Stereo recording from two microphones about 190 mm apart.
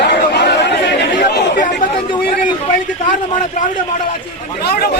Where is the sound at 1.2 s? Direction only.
50° left (ahead or behind).